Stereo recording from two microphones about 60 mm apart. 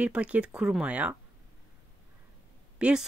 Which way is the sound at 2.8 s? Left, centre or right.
Centre.